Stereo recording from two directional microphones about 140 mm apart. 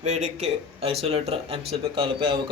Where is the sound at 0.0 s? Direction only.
50° right (ahead or behind).